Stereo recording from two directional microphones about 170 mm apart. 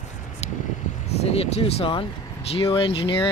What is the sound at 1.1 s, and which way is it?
Speech, 40° left (ahead or behind).